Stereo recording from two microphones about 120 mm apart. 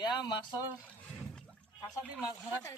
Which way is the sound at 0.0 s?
35° left (ahead or behind).